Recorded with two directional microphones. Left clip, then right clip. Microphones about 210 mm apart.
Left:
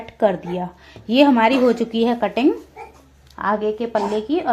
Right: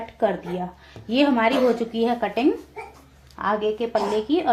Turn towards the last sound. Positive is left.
turn(degrees=25)  # may be behind; listen again after turning